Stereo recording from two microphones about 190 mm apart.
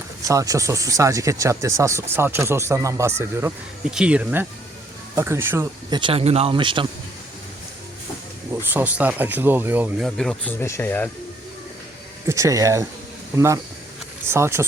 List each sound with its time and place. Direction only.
0.3 s speech: 15° right (ahead or behind)
5.9 s speech: 25° right (ahead or behind)
8.7 s speech: 10° right (ahead or behind)
10.2 s speech: 5° left (ahead or behind)
12.3 s speech: 15° right (ahead or behind)